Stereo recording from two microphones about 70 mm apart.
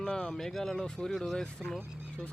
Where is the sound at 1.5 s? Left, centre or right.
Centre.